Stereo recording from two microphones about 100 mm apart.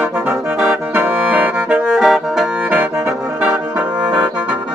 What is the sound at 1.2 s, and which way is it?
Accordion, 10° right (ahead or behind).